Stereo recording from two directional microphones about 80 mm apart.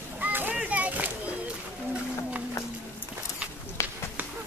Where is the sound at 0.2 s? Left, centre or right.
Right.